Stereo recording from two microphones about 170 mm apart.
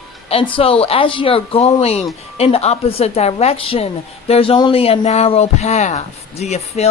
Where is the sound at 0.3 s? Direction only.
35° left (ahead or behind).